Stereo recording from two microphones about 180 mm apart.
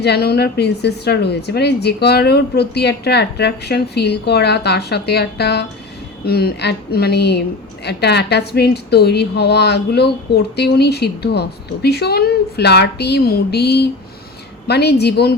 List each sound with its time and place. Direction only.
0.0 s a woman's voice: 60° left (ahead or behind)